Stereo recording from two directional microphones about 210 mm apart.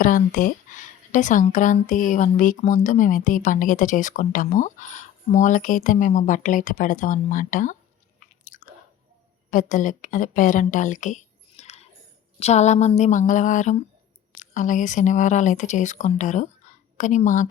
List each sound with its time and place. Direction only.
0.0 s a woman's voice: 40° left (ahead or behind)
8.4 s chewing: 40° left (ahead or behind)
9.5 s a woman's voice: 40° left (ahead or behind)